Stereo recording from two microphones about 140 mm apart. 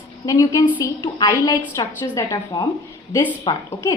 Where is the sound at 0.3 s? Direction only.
25° left (ahead or behind).